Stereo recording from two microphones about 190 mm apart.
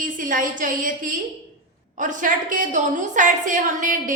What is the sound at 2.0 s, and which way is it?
A woman's voice, 40° right (ahead or behind).